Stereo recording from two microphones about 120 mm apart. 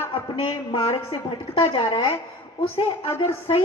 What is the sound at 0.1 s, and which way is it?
A woman's voice, 50° left (ahead or behind).